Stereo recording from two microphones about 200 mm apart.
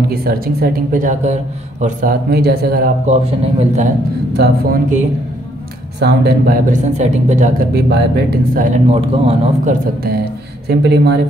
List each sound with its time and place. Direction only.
0.1 s speech: 50° right (ahead or behind)
3.1 s speech: 30° right (ahead or behind)
4.3 s speech: 55° right (ahead or behind)
5.9 s speech: 55° right (ahead or behind); by 7.5 s 35° right (ahead or behind)
7.7 s speech: 55° right (ahead or behind)
8.6 s speech: 35° right (ahead or behind)
9.7 s speech: 50° right (ahead or behind)